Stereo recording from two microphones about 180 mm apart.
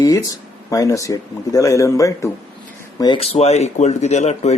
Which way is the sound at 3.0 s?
30° left (ahead or behind).